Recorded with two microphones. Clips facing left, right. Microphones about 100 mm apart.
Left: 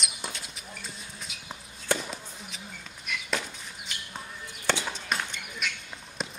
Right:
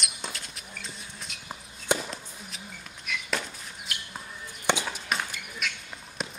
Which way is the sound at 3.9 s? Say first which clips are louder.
Right 3 dB; 5° right (ahead or behind).